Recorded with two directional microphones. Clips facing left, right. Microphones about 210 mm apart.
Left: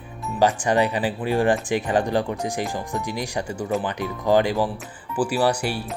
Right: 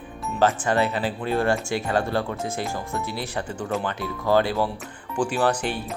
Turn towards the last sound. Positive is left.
turn(degrees=10)  # may be behind; listen again after turning